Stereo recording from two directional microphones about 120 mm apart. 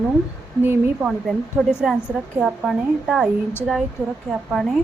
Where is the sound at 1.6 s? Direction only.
5° right (ahead or behind).